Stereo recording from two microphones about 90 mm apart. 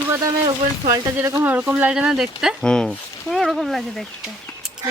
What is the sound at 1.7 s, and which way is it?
Speech, 10° right (ahead or behind).